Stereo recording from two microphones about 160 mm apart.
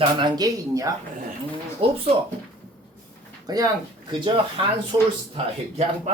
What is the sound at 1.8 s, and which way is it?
Speech, 35° right (ahead or behind).